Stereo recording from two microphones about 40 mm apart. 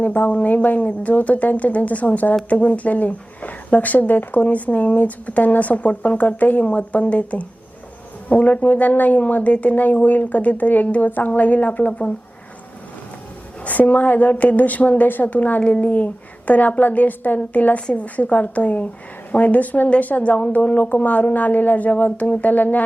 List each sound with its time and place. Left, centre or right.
0.0 s a woman's voice: left
0.3 s speech: left
13.7 s speech: left
15.6 s speech: left
15.9 s speech: left